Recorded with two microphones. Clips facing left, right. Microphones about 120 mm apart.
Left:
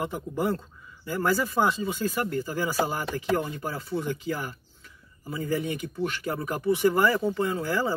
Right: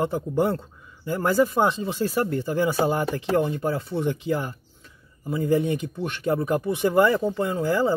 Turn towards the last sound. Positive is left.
turn(degrees=-20)  # may be behind; listen again after turning